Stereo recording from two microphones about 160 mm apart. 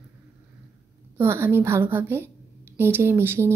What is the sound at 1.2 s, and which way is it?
A woman's voice, 15° right (ahead or behind).